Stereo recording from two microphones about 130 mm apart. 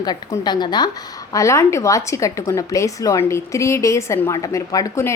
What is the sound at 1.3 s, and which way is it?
A woman's voice, 25° left (ahead or behind).